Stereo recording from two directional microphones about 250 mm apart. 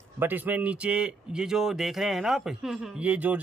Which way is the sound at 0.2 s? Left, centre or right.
Centre.